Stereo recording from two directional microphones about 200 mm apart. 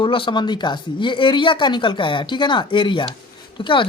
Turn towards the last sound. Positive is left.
turn(degrees=25)  # may be behind; listen again after turning